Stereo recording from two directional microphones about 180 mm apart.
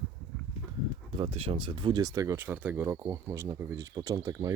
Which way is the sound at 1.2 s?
30° right (ahead or behind).